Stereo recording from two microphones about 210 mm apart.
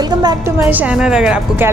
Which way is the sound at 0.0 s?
20° right (ahead or behind).